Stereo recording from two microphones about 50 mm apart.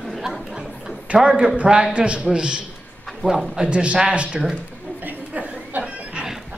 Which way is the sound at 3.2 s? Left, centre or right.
Centre.